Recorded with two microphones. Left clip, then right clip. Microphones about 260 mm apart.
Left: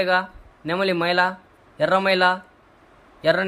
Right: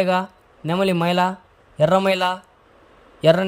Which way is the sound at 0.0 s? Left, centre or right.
Right.